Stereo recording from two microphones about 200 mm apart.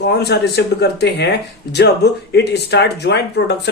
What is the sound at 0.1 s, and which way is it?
Speech, 55° left (ahead or behind).